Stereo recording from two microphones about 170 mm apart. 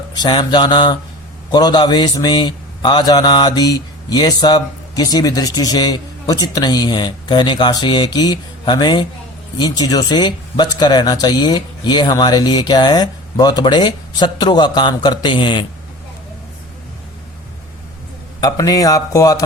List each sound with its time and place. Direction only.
0.1 s a man's voice: 25° left (ahead or behind)
18.3 s a man's voice: 20° left (ahead or behind)